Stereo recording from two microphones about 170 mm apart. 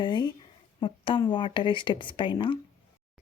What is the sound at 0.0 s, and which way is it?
A woman's voice, 25° left (ahead or behind).